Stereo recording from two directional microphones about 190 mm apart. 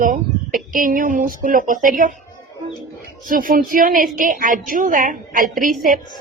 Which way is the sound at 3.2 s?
45° right (ahead or behind).